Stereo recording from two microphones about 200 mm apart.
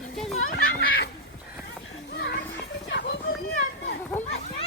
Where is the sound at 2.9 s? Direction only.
60° left (ahead or behind).